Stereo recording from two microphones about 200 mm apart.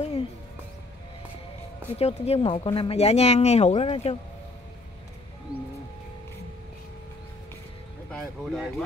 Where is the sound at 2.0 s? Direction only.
30° left (ahead or behind).